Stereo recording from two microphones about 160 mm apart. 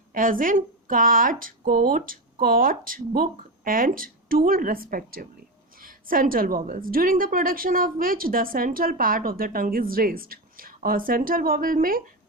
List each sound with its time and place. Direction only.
0.1 s a woman's voice: 60° right (ahead or behind)